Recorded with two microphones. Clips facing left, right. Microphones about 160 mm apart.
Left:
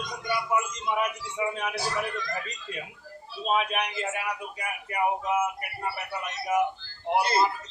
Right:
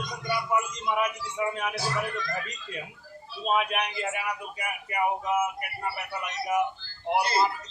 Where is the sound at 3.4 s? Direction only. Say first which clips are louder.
Even; centre (ahead or behind).